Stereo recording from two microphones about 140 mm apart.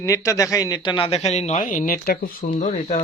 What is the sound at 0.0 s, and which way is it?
Speech, 25° left (ahead or behind).